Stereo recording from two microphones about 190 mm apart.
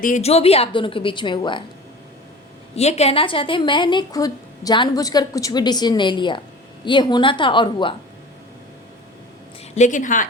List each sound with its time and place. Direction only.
0.0 s a woman's voice: 35° left (ahead or behind)
2.7 s a woman's voice: 35° left (ahead or behind)
9.7 s speech: 40° left (ahead or behind)